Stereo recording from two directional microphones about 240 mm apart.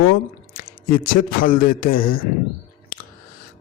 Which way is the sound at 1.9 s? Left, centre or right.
Left.